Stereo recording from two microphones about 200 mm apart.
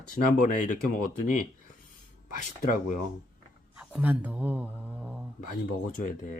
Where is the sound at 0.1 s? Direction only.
40° left (ahead or behind).